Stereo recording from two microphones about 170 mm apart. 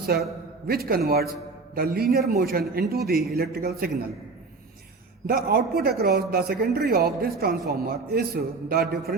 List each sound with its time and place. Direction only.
0.7 s speech: 65° right (ahead or behind)
5.2 s speech: 65° right (ahead or behind)